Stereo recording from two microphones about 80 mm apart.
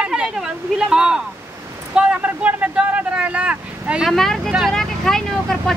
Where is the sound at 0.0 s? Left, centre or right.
Centre.